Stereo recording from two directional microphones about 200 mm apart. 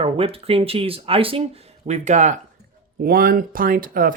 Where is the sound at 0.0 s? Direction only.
30° right (ahead or behind).